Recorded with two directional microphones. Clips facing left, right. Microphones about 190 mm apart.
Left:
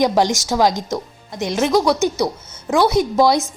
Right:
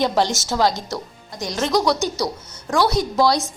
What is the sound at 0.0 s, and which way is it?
A woman's voice, 15° left (ahead or behind).